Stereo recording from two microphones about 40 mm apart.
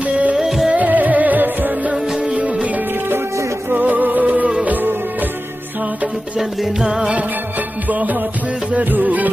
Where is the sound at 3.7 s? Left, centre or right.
Right.